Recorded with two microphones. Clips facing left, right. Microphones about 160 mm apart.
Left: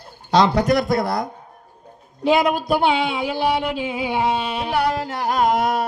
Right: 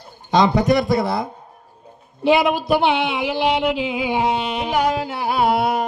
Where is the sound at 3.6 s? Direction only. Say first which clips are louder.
Right 3 dB; 10° right (ahead or behind).